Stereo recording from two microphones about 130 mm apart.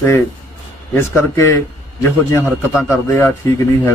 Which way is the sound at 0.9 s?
20° left (ahead or behind).